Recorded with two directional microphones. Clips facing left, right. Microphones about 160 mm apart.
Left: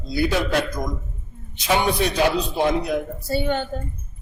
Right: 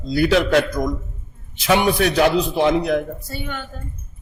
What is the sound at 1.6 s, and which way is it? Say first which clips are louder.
Speech: right 3 dB; 85° right.